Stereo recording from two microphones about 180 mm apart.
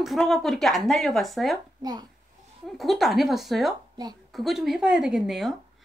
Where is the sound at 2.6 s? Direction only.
Centre (ahead or behind).